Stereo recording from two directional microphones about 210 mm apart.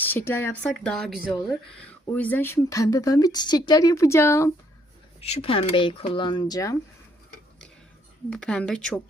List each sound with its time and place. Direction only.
0.0 s speech: 10° left (ahead or behind)
5.2 s speech: 30° left (ahead or behind)
8.3 s speech: 5° left (ahead or behind)